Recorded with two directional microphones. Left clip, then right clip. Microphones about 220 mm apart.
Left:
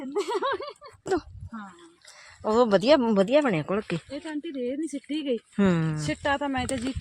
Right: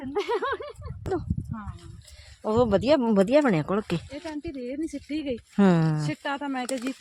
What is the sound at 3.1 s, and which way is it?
Speech, 20° right (ahead or behind).